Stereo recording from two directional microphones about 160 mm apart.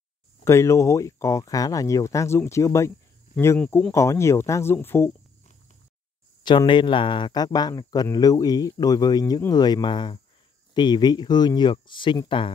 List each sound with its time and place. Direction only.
0.4 s speech: 15° left (ahead or behind)
6.4 s speech: 30° left (ahead or behind)